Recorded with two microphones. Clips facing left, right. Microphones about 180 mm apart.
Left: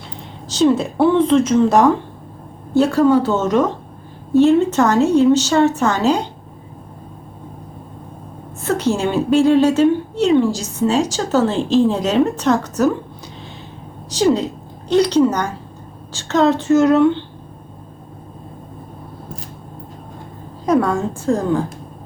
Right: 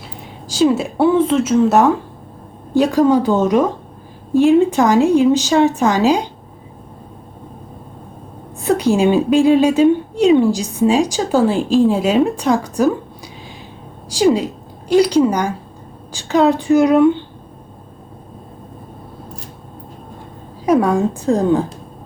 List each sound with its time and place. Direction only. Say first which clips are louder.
0.4 s speech: even; 10° right (ahead or behind)
2.7 s a woman's voice: even; 15° right (ahead or behind)
8.6 s a woman's voice: right 4 dB; 15° right (ahead or behind)
14.3 s a woman's voice: right 1 dB; 10° right (ahead or behind)
20.7 s a woman's voice: right 2 dB; 15° right (ahead or behind)